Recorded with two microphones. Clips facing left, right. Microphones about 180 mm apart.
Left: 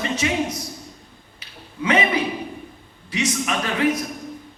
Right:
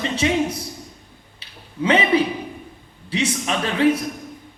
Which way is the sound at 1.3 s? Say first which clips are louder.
Right 4 dB; 30° right (ahead or behind).